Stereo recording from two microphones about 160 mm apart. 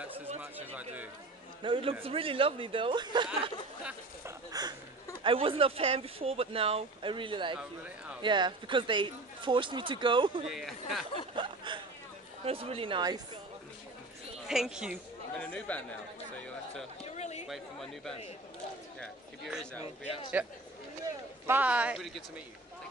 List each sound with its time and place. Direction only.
0.4 s speech: 10° right (ahead or behind)
1.6 s speech: 35° right (ahead or behind)
4.5 s speech: 25° right (ahead or behind)
7.5 s speech: 5° right (ahead or behind)
8.2 s speech: 30° right (ahead or behind)
10.5 s speech: centre (ahead or behind)
11.3 s speech: 30° right (ahead or behind)
14.5 s speech: 5° right (ahead or behind)
15.3 s speech: 5° left (ahead or behind)
17.0 s speech: 45° left (ahead or behind)
17.5 s speech: centre (ahead or behind)
20.4 s speech: 10° right (ahead or behind)